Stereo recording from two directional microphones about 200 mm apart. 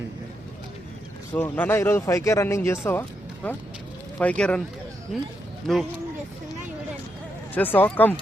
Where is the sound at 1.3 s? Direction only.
10° left (ahead or behind).